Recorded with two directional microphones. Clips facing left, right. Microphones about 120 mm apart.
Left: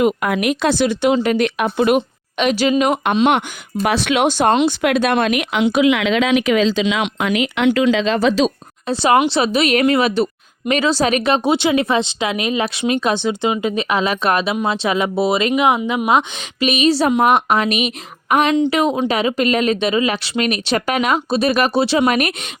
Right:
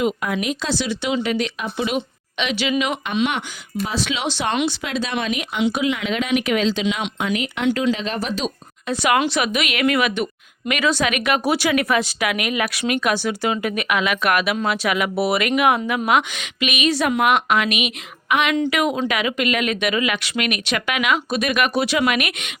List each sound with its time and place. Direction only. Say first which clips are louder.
0.0 s speech: left 5 dB; 60° left (ahead or behind)
2.0 s a woman's voice: left 6 dB; 40° left (ahead or behind)
3.8 s speech: left 9 dB; 65° left (ahead or behind); by 4.5 s 45° left (ahead or behind)
4.6 s speech: left 8 dB; 60° left (ahead or behind); by 5.6 s 80° left
5.7 s speech: left 7 dB; 90° left
6.8 s speech: left 4 dB; 80° left
8.9 s a woman's voice: left 4 dB; 30° left (ahead or behind)
18.5 s a woman's voice: left 4 dB; 25° left (ahead or behind)